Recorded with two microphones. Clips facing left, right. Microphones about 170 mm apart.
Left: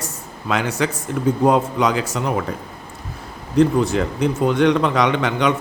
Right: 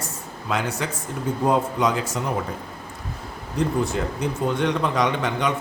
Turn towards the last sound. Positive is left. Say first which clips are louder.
# left 5 dB
turn(degrees=90)